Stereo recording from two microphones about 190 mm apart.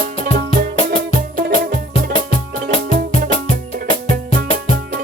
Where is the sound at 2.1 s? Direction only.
30° left (ahead or behind).